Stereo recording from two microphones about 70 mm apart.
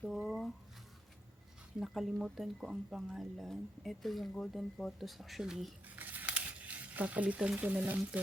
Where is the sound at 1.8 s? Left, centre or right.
Centre.